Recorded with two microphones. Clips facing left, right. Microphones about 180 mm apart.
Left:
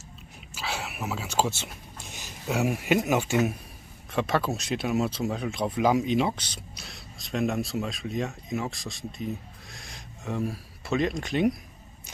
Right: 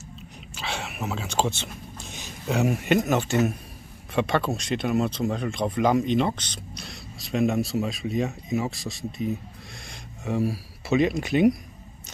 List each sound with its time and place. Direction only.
0.6 s speech: 5° left (ahead or behind)